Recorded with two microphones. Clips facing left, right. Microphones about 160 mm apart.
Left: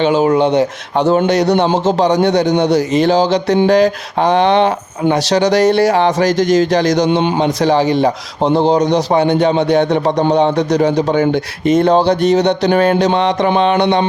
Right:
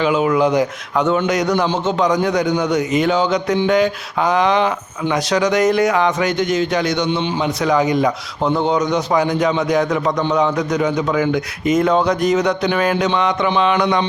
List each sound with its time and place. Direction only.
0.0 s a man's voice: 30° left (ahead or behind); by 7.4 s 50° left (ahead or behind)
7.4 s a man's voice: 30° left (ahead or behind)